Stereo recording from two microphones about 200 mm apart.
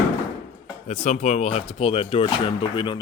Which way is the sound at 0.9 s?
35° left (ahead or behind).